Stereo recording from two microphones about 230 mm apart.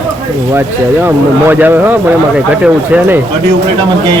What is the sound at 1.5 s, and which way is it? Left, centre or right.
Speech, centre.